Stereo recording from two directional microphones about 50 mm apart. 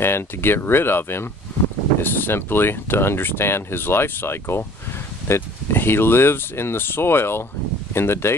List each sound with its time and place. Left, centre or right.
0.0 s speech: left